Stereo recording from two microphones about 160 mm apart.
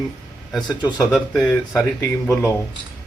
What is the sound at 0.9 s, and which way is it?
Speech, 5° right (ahead or behind).